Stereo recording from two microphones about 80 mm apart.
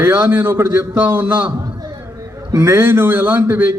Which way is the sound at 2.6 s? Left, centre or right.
Right.